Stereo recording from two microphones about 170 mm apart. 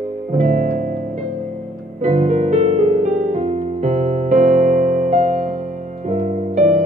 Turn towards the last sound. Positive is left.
turn(degrees=-45)  # may be behind; listen again after turning